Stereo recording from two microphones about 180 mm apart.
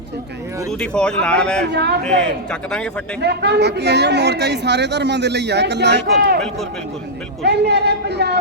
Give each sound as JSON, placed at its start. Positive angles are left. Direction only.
{"t": 0.7, "sound": "speech", "side_deg": 5}
{"t": 1.7, "sound": "a woman's voice", "side_deg": -65}
{"t": 2.0, "sound": "speech", "side_deg": 5}
{"t": 3.2, "sound": "a woman's voice", "side_deg": -70}
{"t": 7.4, "sound": "a woman's voice", "side_deg": -70}